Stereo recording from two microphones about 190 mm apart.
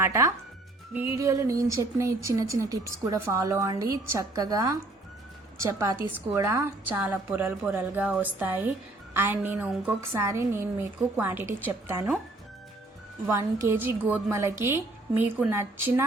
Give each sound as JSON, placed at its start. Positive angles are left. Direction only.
{"t": 0.0, "sound": "speech", "side_deg": -15}
{"t": 13.2, "sound": "speech", "side_deg": -15}